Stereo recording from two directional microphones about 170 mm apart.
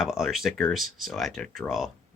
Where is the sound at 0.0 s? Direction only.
Centre (ahead or behind).